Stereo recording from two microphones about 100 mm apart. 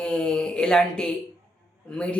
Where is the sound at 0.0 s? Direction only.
10° left (ahead or behind).